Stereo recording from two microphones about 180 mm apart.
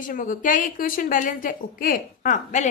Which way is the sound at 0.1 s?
50° left (ahead or behind).